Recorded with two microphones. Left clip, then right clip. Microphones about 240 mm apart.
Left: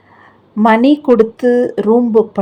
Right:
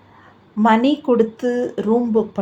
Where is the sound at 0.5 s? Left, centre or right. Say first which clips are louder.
Left 5 dB; left.